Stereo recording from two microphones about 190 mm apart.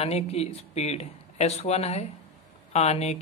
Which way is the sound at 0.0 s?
35° left (ahead or behind).